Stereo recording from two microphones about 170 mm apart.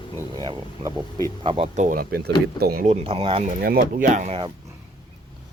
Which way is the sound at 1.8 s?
55° right (ahead or behind).